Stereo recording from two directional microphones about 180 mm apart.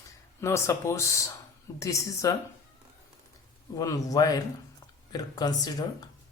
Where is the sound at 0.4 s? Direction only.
15° left (ahead or behind).